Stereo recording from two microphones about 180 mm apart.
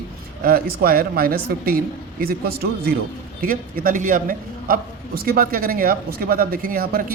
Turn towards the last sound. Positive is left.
turn(degrees=-55)  # may be behind; listen again after turning